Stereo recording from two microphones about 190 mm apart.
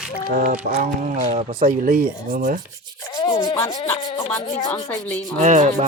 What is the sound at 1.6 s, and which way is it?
Speech, 50° right (ahead or behind).